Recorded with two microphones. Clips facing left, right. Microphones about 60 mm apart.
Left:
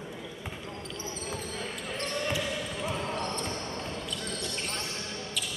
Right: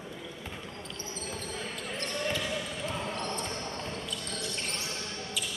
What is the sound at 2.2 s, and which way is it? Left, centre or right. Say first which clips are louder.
Basketball bounce: right 1 dB; centre.